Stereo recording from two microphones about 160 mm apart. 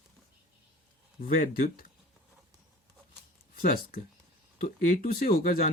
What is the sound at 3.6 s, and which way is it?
Speech, 65° left (ahead or behind).